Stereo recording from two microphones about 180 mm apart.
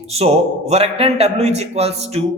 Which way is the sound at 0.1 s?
35° right (ahead or behind).